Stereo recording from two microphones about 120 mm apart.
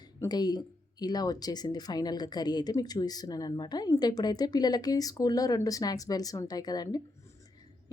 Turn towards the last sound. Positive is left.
turn(degrees=35)  # may be behind; listen again after turning